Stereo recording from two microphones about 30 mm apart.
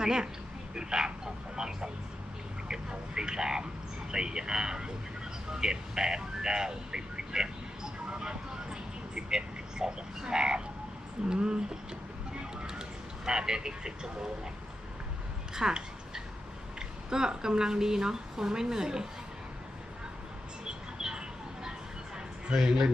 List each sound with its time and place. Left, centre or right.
0.0 s a woman's voice: right
3.2 s a woman's voice: right
5.5 s a sound: right
10.2 s a woman's voice: right
12.4 s vehicle: right
13.2 s a woman's voice: right
15.5 s a sound: right
17.1 s a woman's voice: right
20.7 s mouse: right
22.5 s speech: centre